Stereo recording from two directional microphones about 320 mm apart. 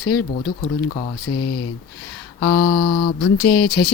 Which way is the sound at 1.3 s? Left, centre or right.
Left.